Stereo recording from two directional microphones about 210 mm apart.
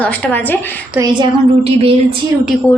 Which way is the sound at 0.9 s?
20° right (ahead or behind).